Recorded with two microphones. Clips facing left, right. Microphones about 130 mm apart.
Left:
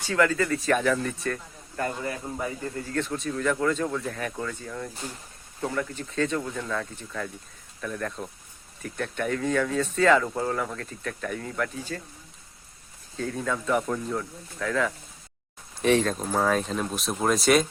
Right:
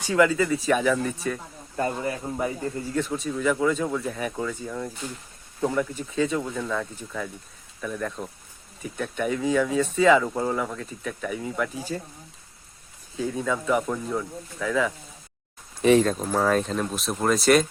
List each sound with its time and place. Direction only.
0.0 s speech: 15° right (ahead or behind)
1.7 s speech: 20° right (ahead or behind)
2.9 s speech: 10° right (ahead or behind)
13.1 s speech: 5° right (ahead or behind)